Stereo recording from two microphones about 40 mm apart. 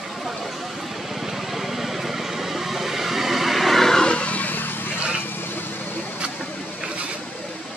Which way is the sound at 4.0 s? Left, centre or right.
Left.